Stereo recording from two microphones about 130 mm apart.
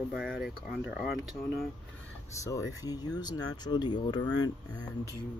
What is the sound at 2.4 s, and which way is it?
Speech, 25° left (ahead or behind).